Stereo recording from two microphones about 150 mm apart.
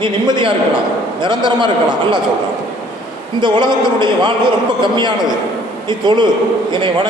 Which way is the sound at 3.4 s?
30° right (ahead or behind).